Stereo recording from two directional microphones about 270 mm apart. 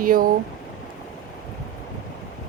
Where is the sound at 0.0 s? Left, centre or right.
Right.